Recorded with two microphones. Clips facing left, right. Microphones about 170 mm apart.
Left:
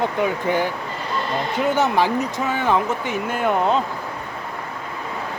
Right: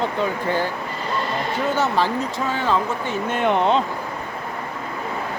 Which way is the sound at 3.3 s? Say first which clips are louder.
Right 1 dB; 5° left (ahead or behind).